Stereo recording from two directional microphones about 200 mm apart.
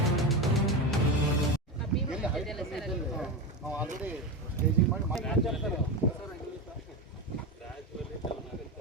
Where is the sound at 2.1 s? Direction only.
Centre (ahead or behind).